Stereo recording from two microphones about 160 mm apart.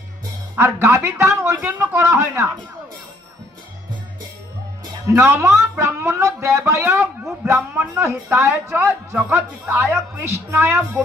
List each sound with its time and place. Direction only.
0.5 s a man's voice: 15° right (ahead or behind)
5.1 s a man's voice: 15° right (ahead or behind)